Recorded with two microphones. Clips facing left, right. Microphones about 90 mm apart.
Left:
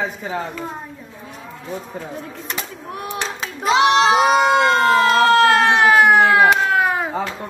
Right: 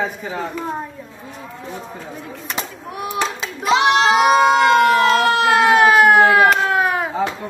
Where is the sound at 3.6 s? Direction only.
30° left (ahead or behind).